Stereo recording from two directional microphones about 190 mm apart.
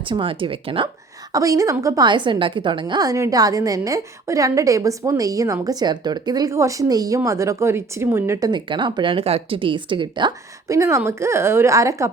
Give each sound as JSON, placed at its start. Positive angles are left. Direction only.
{"t": 0.0, "sound": "speech", "side_deg": -25}
{"t": 1.3, "sound": "a woman's voice", "side_deg": -15}